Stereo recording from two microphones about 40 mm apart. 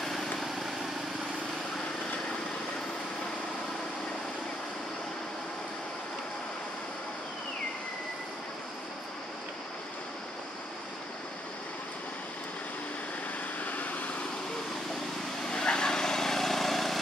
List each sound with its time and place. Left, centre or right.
0.0 s vehicle: centre
13.7 s vehicle: left
15.4 s vehicle: centre